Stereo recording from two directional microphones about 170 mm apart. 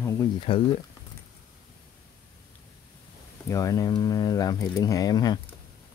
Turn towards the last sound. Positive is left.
turn(degrees=25)  # may be behind; listen again after turning